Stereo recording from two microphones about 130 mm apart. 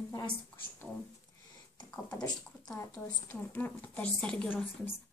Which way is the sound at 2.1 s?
30° left (ahead or behind).